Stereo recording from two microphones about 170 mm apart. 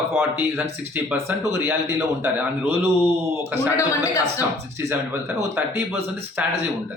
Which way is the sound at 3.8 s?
20° left (ahead or behind).